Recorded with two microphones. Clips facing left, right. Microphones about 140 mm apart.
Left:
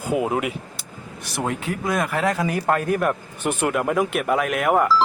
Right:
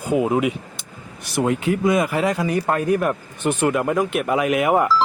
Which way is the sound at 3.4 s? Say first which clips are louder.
Right 3 dB; 10° left (ahead or behind).